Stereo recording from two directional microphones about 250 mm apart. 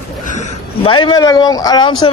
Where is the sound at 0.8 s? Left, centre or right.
Centre.